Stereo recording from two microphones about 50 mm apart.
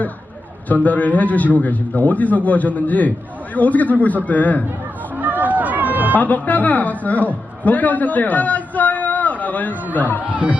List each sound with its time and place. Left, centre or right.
0.7 s a man's voice: left
5.1 s run: right
6.1 s a man's voice: left
10.2 s speech: right